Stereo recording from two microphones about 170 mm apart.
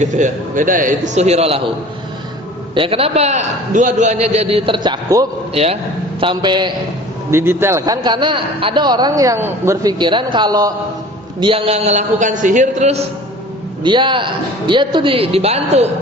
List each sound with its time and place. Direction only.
0.0 s a man's voice: 50° right (ahead or behind)
2.7 s a man's voice: 30° right (ahead or behind)
7.3 s a man's voice: 15° right (ahead or behind); by 13.0 s 45° right (ahead or behind)
13.8 s a man's voice: 30° right (ahead or behind)